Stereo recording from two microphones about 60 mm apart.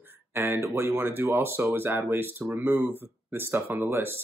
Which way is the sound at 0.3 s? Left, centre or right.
Right.